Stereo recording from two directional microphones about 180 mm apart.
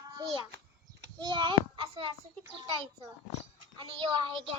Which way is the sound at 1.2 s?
25° right (ahead or behind).